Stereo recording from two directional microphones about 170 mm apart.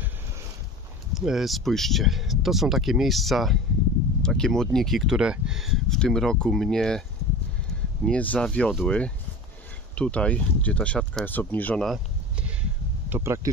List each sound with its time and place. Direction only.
1.1 s speech: centre (ahead or behind)
8.0 s speech: 5° left (ahead or behind)
13.1 s speech: 15° right (ahead or behind)